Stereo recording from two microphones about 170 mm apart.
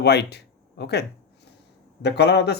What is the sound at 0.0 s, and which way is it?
A man's voice, 75° left (ahead or behind).